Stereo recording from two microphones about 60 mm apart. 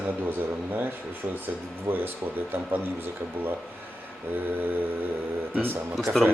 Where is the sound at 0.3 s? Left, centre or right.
Right.